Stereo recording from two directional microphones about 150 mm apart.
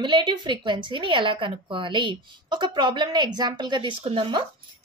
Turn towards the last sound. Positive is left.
turn(degrees=-35)  # may be behind; listen again after turning